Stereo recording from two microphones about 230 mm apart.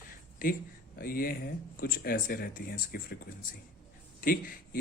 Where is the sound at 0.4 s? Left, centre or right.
Left.